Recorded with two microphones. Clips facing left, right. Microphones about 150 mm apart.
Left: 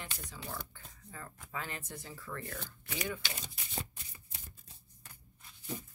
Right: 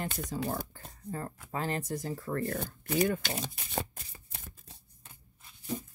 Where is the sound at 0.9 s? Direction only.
45° right (ahead or behind).